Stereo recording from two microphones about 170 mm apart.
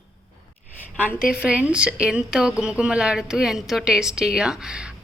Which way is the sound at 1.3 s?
5° right (ahead or behind).